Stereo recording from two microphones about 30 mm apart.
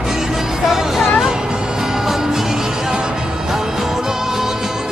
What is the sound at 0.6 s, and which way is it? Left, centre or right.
Speech, centre.